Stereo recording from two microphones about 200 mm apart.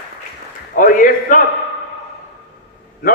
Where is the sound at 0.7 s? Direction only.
40° left (ahead or behind).